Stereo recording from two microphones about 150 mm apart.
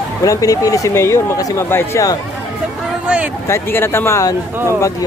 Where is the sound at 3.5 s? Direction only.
15° left (ahead or behind).